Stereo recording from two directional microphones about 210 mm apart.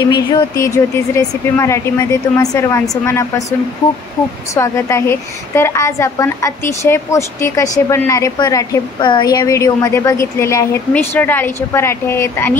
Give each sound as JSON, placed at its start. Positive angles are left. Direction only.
{"t": 0.3, "sound": "a woman's voice", "side_deg": 15}
{"t": 4.6, "sound": "a woman's voice", "side_deg": 15}